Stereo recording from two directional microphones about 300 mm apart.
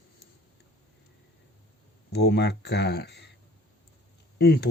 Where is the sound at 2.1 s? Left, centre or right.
Left.